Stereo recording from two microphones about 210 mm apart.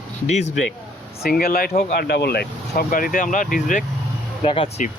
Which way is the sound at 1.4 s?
45° left (ahead or behind).